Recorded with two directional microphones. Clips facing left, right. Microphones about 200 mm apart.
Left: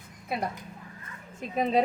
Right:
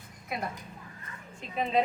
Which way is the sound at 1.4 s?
40° left (ahead or behind).